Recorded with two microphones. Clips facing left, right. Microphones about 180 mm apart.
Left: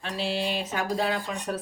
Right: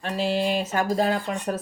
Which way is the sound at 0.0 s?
45° right (ahead or behind).